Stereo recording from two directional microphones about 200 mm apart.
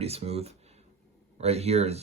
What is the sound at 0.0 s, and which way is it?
Speech, 30° right (ahead or behind).